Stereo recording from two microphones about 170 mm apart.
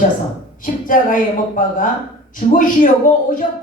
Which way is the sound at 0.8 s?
50° left (ahead or behind).